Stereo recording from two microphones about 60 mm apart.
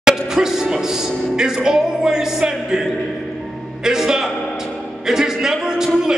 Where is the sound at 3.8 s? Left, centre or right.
Centre.